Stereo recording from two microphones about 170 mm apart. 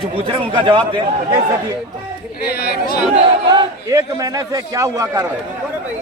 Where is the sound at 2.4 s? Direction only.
65° left (ahead or behind).